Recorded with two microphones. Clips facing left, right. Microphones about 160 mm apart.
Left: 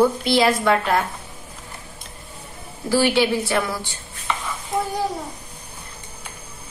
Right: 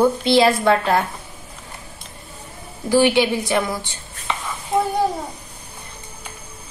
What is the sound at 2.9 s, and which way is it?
Speech, 15° right (ahead or behind).